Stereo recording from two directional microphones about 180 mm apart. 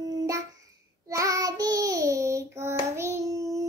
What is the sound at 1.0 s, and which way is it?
Child singing, 15° right (ahead or behind).